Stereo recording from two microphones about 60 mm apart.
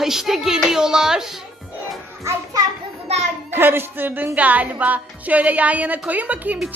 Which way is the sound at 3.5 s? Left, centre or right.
Right.